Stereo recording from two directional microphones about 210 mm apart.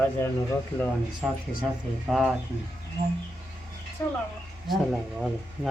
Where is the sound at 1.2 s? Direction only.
Centre (ahead or behind).